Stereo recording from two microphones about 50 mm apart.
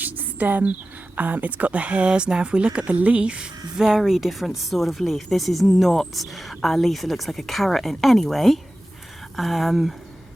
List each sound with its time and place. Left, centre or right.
0.0 s a sound: right
1.1 s speech: right
3.8 s speech: centre